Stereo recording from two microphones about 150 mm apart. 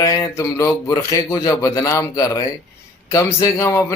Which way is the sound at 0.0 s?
20° left (ahead or behind).